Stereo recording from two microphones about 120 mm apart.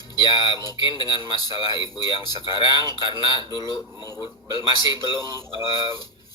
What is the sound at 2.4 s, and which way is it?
Speech, 40° right (ahead or behind).